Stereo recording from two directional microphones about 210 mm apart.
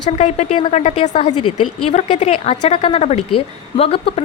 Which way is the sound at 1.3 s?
90° left.